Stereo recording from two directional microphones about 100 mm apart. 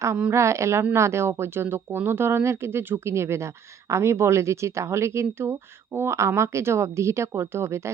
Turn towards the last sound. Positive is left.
turn(degrees=-25)  # may be behind; listen again after turning